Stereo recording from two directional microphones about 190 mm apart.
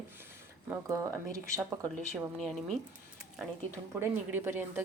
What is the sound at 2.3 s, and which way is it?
Speech, centre (ahead or behind).